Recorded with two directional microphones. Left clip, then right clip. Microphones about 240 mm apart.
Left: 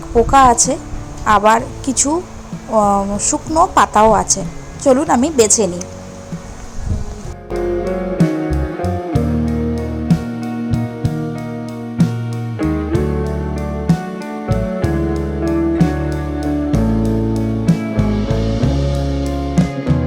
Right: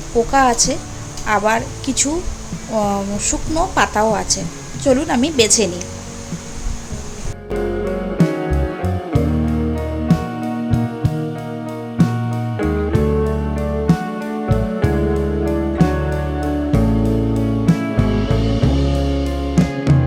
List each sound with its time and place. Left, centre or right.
0.3 s a woman's voice: centre
7.5 s music: centre